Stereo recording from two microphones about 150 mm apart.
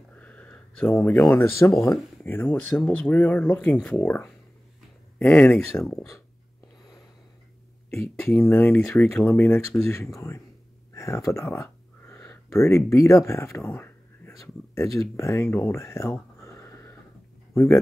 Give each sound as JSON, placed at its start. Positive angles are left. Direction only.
{"t": 0.1, "sound": "a sound", "side_deg": 10}
{"t": 1.7, "sound": "speech", "side_deg": 0}
{"t": 2.2, "sound": "speech", "side_deg": 15}
{"t": 5.9, "sound": "speech", "side_deg": 20}
{"t": 8.3, "sound": "speech", "side_deg": 15}
{"t": 10.9, "sound": "a sound", "side_deg": 20}
{"t": 13.2, "sound": "speech", "side_deg": 20}